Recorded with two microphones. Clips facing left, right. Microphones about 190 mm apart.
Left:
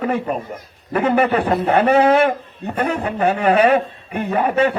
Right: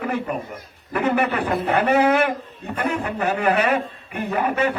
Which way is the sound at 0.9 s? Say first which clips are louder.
Left 4 dB; 30° left (ahead or behind).